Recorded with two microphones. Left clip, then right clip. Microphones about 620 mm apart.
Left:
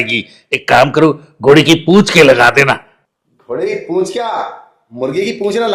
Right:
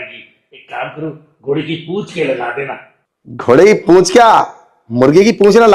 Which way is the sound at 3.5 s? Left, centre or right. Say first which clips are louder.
Right 8 dB; right.